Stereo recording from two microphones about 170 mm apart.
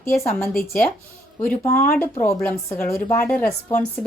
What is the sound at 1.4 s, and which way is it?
A woman's voice, 10° left (ahead or behind).